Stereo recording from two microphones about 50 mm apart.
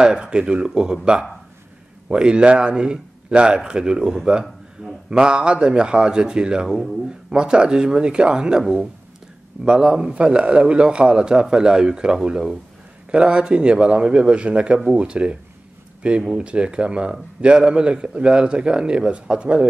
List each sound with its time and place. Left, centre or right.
0.0 s a man's voice: centre
4.8 s a sound: centre
5.1 s a man's voice: centre
10.1 s a man's voice: right